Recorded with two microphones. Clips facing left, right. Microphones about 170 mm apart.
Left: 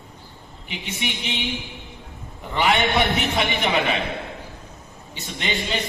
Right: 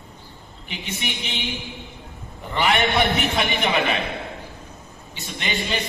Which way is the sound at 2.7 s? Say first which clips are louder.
Even; 20° left (ahead or behind).